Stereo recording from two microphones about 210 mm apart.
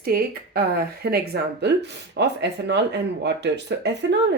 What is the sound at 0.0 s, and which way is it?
Speech, 45° right (ahead or behind).